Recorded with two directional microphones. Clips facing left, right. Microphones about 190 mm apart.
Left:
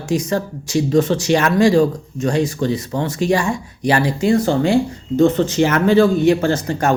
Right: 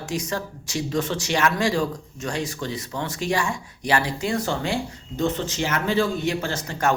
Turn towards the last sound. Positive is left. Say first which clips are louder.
# left 7 dB
turn(degrees=40)  # may be behind; listen again after turning